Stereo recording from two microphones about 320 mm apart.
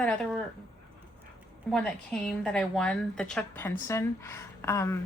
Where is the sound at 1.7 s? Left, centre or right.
Centre.